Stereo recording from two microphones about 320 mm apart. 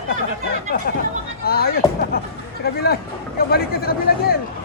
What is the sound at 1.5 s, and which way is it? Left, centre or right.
Speech, left.